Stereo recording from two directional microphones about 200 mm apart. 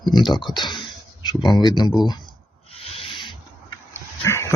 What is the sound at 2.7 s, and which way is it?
Owl, 30° left (ahead or behind).